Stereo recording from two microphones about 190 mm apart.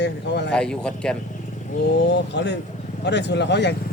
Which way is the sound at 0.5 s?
5° left (ahead or behind).